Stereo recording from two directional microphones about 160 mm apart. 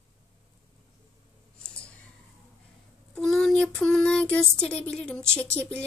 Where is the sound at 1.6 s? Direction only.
5° left (ahead or behind).